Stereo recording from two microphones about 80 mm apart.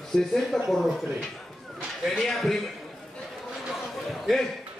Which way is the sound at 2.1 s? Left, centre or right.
Centre.